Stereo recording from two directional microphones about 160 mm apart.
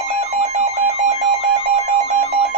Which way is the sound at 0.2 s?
45° right (ahead or behind).